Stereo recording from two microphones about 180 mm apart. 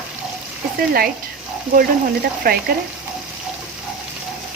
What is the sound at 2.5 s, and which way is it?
Speech, 55° right (ahead or behind).